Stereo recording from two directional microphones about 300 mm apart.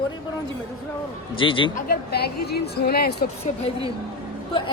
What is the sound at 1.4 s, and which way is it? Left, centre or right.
Speech, centre.